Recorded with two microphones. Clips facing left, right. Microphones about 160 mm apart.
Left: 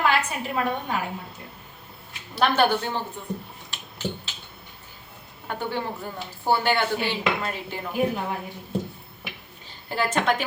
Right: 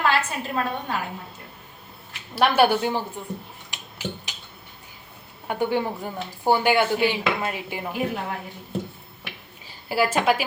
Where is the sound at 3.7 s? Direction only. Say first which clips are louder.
Left 1 dB; 15° right (ahead or behind).